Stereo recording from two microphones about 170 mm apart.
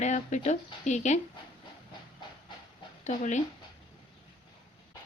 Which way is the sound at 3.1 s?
45° left (ahead or behind).